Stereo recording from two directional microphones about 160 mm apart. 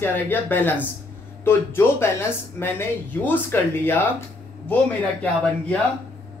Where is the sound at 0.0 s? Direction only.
15° left (ahead or behind).